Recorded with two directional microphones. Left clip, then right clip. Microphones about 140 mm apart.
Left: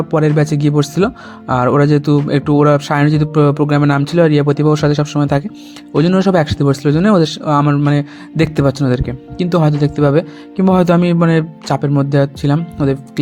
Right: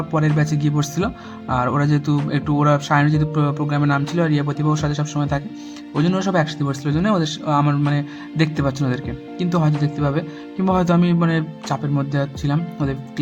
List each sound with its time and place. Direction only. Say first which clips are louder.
0.1 s speech: left 7 dB; 40° left (ahead or behind)